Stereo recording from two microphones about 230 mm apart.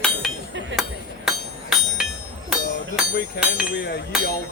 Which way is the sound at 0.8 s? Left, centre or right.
Centre.